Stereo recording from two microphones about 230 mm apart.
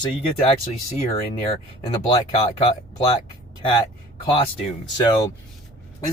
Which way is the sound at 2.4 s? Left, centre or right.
Left.